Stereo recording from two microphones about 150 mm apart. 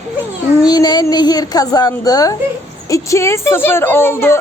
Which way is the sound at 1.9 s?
25° left (ahead or behind).